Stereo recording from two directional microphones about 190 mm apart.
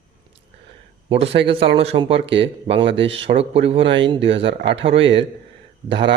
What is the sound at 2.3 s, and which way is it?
Speech, 70° right (ahead or behind).